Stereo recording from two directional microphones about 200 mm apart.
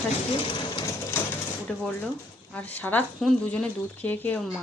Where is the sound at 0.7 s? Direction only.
20° left (ahead or behind).